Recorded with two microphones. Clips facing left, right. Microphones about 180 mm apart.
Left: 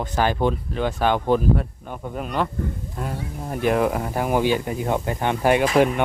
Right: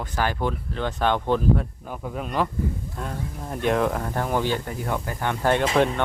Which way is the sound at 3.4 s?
5° left (ahead or behind).